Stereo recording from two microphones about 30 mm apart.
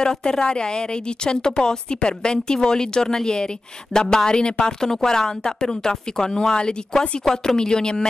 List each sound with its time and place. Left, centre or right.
0.0 s speech: left